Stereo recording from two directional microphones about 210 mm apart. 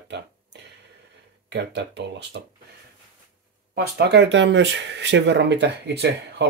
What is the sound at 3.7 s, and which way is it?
Speech, 50° right (ahead or behind).